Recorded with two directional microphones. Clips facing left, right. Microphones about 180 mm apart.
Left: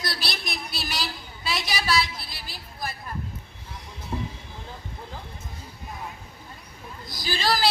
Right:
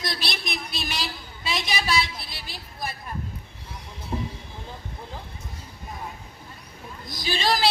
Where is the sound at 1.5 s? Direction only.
20° right (ahead or behind).